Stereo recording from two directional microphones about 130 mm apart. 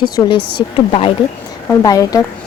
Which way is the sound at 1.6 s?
25° left (ahead or behind).